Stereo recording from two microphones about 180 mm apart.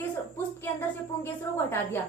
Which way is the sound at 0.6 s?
10° left (ahead or behind).